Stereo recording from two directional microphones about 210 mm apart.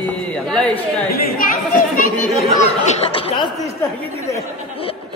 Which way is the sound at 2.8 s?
30° left (ahead or behind).